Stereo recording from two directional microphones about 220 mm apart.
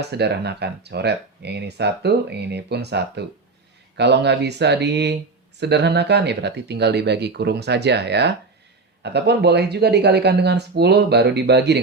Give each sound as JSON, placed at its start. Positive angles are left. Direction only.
{"t": 0.0, "sound": "speech", "side_deg": -50}